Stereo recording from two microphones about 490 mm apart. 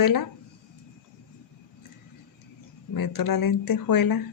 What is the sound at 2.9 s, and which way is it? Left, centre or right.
Speech, left.